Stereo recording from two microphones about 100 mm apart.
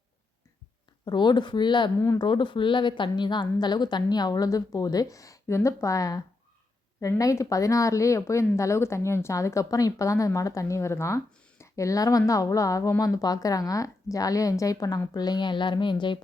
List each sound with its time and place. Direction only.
1.0 s a woman's voice: 50° left (ahead or behind)